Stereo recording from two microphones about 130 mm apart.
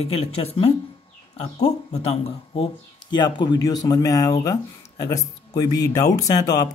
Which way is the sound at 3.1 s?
35° left (ahead or behind).